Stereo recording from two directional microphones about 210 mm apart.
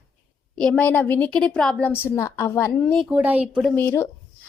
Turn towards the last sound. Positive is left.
turn(degrees=10)  # may be behind; listen again after turning